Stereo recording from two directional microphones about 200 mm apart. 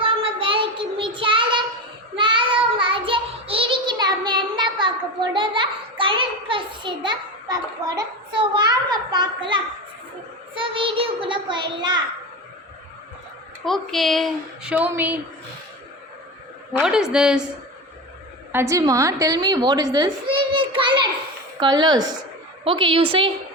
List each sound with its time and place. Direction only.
0.0 s child singing: 25° right (ahead or behind)
5.3 s a sound: 25° right (ahead or behind)
10.5 s a child's voice: 25° right (ahead or behind)
13.7 s speech: centre (ahead or behind)
16.8 s speech: 5° right (ahead or behind)
18.5 s a woman's voice: 15° right (ahead or behind)